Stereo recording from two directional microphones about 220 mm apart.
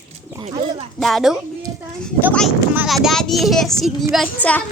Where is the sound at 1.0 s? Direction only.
Centre (ahead or behind).